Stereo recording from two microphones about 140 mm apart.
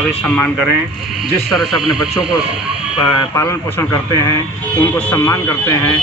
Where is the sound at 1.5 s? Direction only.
Centre (ahead or behind).